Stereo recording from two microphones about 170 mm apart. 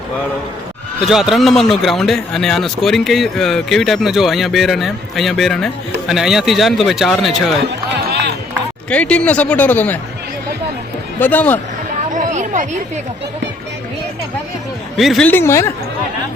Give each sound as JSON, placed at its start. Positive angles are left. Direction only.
{"t": 1.0, "sound": "a man's voice", "side_deg": 0}
{"t": 8.9, "sound": "a man's voice", "side_deg": 5}
{"t": 11.2, "sound": "a man's voice", "side_deg": 10}
{"t": 12.1, "sound": "a sound", "side_deg": -45}
{"t": 14.9, "sound": "a man's voice", "side_deg": 0}
{"t": 15.3, "sound": "a man's voice", "side_deg": 15}